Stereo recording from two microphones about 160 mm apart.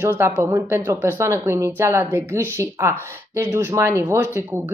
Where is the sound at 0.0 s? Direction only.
15° right (ahead or behind).